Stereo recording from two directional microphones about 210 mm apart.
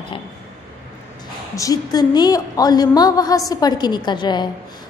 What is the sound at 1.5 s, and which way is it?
A woman's voice, 15° left (ahead or behind).